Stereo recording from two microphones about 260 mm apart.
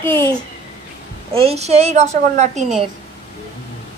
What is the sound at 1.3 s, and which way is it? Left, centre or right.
A woman's voice, right.